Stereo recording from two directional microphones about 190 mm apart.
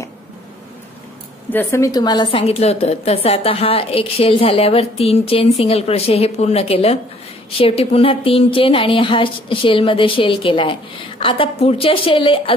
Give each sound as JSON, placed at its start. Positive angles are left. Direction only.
{"t": 1.5, "sound": "a woman's voice", "side_deg": 10}